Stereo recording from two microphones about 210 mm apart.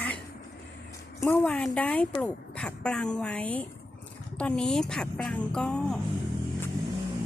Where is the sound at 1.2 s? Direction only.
10° left (ahead or behind).